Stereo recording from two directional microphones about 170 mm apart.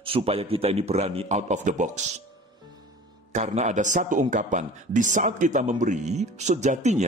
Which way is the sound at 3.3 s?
40° right (ahead or behind).